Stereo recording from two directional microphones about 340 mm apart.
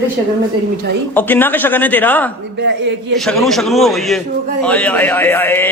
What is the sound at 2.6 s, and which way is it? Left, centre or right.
Speech, right.